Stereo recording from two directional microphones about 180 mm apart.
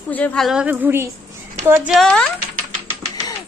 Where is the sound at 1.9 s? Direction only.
5° left (ahead or behind).